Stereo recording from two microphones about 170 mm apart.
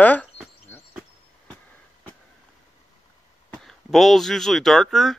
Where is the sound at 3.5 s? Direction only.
Centre (ahead or behind).